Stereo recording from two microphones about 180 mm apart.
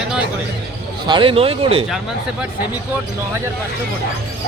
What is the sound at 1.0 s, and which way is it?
Speech, 30° right (ahead or behind).